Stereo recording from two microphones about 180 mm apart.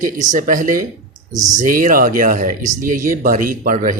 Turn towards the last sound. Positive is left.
turn(degrees=-45)  # may be behind; listen again after turning